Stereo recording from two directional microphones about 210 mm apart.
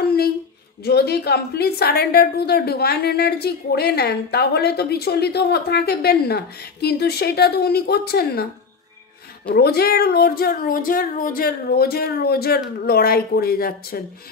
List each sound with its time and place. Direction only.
0.0 s a sound: 50° left (ahead or behind)
0.8 s a woman's voice: 50° left (ahead or behind)
9.6 s a woman's voice: 50° left (ahead or behind)